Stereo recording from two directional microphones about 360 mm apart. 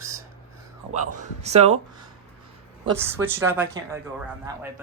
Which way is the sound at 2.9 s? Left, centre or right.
Centre.